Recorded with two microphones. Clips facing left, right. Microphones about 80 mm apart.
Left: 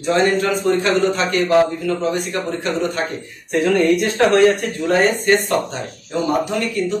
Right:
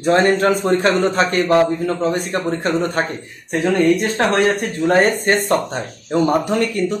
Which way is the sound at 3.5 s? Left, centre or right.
Right.